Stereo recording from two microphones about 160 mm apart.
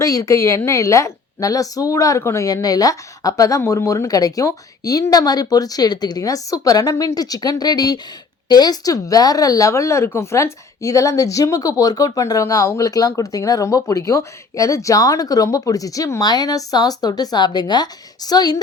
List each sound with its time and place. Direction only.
0.0 s speech: 20° left (ahead or behind)